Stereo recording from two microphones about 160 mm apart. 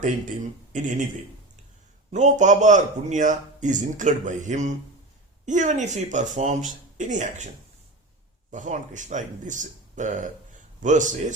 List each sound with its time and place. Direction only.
0.7 s speech: 50° right (ahead or behind)
2.1 s speech: 50° right (ahead or behind)
8.4 s speech: 50° right (ahead or behind)